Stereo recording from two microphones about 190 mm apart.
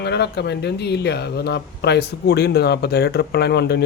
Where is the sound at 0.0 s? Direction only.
60° left (ahead or behind).